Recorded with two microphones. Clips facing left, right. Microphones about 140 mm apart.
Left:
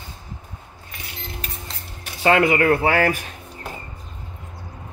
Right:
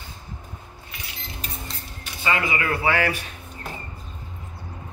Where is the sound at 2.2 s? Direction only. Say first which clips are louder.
Left 8 dB; 65° left (ahead or behind).